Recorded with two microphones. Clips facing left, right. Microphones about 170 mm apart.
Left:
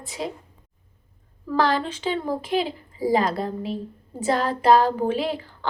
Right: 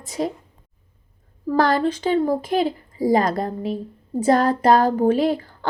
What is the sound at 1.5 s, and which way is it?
Speech, 45° right (ahead or behind).